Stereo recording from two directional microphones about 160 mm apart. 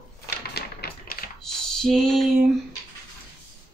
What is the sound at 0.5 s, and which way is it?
Typewriter, 70° left (ahead or behind).